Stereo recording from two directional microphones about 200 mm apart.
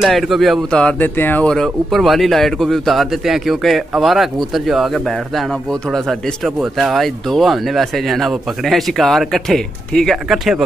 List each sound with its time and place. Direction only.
0.0 s speech: centre (ahead or behind)